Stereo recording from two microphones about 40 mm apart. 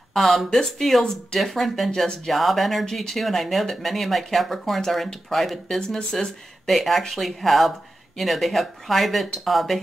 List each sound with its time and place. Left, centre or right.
0.1 s speech: centre
5.8 s speech: centre
6.6 s speech: centre